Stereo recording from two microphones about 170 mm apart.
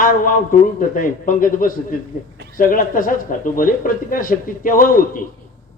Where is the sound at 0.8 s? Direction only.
55° left (ahead or behind).